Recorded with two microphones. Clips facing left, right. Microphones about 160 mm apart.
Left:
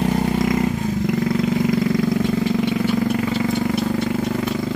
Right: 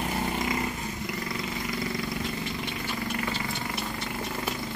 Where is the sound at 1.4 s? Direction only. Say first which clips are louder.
Left 14 dB; 90° left.